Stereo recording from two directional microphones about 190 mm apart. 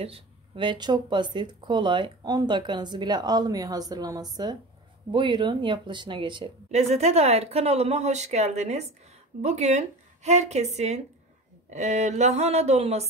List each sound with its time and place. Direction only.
0.0 s speech: 25° right (ahead or behind)